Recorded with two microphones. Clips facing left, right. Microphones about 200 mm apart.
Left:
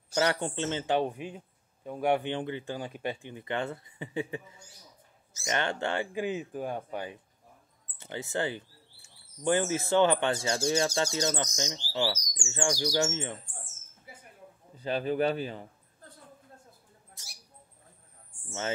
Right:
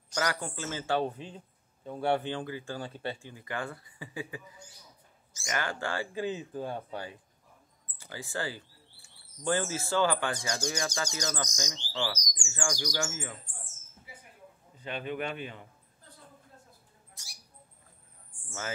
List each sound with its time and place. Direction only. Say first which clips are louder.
0.1 s speech: left 5 dB; 25° left (ahead or behind)
14.8 s a man's voice: left 7 dB; 35° left (ahead or behind)